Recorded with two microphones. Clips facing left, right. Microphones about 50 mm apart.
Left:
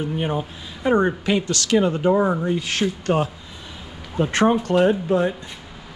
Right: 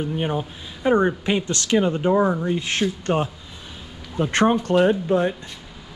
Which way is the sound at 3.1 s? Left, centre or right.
Centre.